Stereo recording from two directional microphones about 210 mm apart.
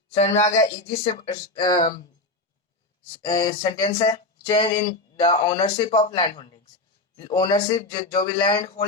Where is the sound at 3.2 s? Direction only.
25° left (ahead or behind).